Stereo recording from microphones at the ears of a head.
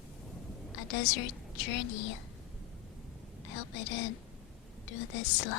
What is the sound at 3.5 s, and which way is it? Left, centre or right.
A woman's voice, left.